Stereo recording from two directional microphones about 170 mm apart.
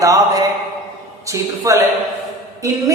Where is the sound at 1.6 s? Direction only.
20° right (ahead or behind).